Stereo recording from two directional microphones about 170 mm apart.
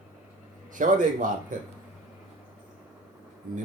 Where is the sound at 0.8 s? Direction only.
50° right (ahead or behind).